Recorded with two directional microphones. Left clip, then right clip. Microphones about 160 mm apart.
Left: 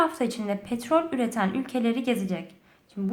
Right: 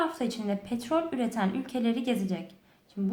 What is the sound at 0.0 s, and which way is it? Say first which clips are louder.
A woman's voice: left 5 dB; 25° left (ahead or behind).